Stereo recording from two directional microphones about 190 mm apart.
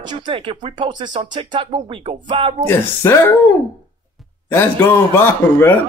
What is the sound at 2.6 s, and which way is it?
Speech, 15° left (ahead or behind).